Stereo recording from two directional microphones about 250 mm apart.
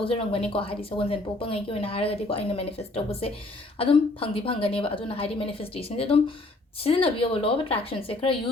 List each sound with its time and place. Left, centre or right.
0.0 s speech: left